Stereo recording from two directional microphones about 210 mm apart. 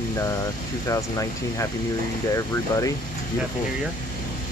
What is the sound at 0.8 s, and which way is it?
Speech, 15° left (ahead or behind).